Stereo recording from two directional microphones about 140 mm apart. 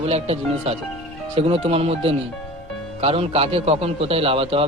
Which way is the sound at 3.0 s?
45° right (ahead or behind).